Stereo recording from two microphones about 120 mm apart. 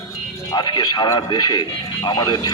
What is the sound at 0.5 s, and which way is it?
Speech, 35° left (ahead or behind).